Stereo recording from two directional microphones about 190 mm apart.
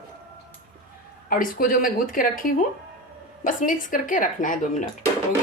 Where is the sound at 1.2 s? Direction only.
50° left (ahead or behind).